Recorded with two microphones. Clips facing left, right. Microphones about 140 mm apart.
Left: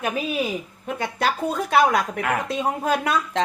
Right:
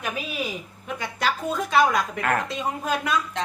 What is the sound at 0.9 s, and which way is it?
Speech, 50° left (ahead or behind).